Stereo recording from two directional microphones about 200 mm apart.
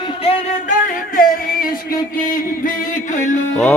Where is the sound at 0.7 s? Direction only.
45° left (ahead or behind).